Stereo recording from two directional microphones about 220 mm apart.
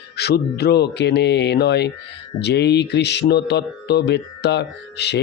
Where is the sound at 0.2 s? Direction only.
45° left (ahead or behind).